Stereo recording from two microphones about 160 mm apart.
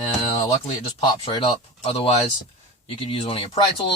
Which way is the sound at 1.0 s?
30° left (ahead or behind).